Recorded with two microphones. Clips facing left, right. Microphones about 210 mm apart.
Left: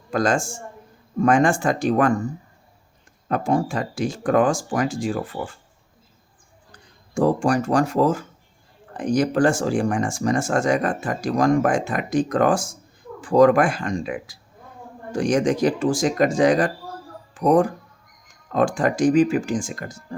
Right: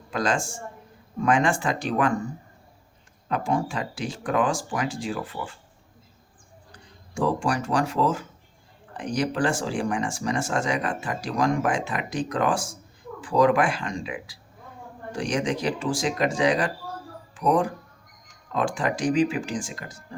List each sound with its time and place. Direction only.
0.1 s speech: 45° left (ahead or behind)
3.2 s speech: 45° left (ahead or behind)
7.1 s speech: 45° left (ahead or behind)